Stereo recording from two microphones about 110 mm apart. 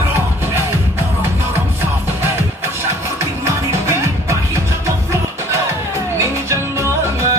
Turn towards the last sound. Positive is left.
turn(degrees=-25)  # may be behind; listen again after turning